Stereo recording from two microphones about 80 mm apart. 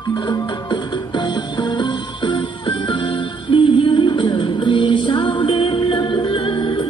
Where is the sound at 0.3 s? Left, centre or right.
Left.